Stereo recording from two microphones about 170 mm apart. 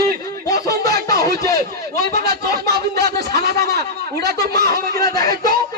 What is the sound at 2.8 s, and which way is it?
A man's voice, 70° right (ahead or behind).